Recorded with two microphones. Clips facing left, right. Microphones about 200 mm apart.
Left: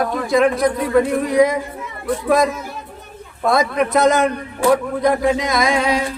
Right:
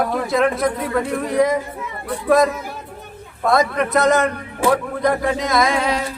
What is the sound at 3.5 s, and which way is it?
A man's voice, centre (ahead or behind).